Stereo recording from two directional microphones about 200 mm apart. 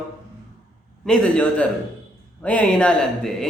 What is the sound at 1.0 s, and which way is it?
Speech, 5° left (ahead or behind).